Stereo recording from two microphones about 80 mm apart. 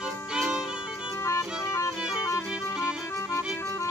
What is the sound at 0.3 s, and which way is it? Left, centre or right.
Music, centre.